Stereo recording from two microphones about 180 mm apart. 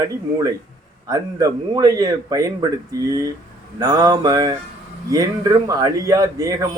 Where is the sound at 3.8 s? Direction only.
20° right (ahead or behind).